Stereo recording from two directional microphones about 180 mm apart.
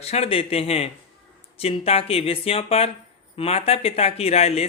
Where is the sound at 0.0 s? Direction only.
35° left (ahead or behind).